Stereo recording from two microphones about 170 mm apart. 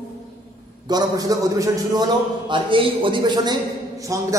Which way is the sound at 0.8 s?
20° right (ahead or behind).